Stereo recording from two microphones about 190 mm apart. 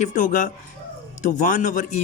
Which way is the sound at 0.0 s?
40° left (ahead or behind).